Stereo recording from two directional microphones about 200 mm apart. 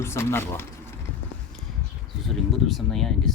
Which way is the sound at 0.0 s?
15° left (ahead or behind).